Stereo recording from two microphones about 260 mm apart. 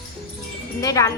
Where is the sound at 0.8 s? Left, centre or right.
Centre.